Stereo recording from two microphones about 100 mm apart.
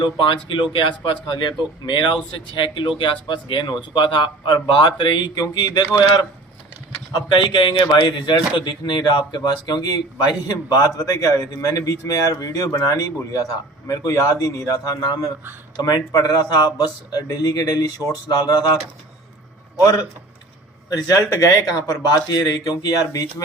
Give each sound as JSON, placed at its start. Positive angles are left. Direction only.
{"t": 0.0, "sound": "speech", "side_deg": 55}
{"t": 7.3, "sound": "speech", "side_deg": 55}